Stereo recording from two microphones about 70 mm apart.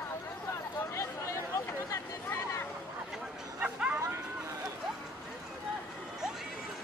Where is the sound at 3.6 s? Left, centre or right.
Centre.